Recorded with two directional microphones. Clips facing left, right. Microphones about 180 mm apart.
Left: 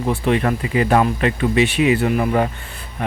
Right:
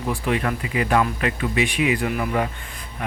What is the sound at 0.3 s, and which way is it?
Speech, 35° left (ahead or behind).